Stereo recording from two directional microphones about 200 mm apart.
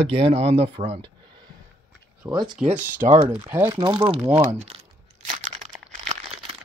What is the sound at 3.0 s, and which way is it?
Speech, 35° right (ahead or behind).